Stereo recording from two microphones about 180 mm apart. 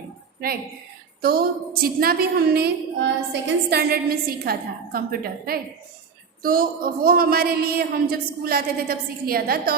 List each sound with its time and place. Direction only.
0.3 s a woman's voice: 55° right (ahead or behind)